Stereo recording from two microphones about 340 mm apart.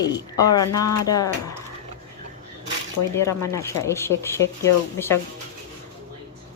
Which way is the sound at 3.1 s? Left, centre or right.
Centre.